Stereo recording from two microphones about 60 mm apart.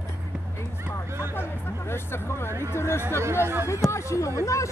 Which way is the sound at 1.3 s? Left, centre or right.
Left.